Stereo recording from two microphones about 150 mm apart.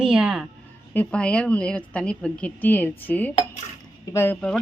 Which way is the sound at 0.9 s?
10° left (ahead or behind).